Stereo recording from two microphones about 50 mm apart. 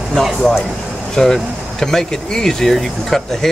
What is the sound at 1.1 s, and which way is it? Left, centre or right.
Speech, centre.